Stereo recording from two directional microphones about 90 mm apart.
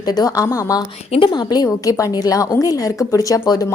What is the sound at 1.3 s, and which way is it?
A woman's voice, 50° left (ahead or behind).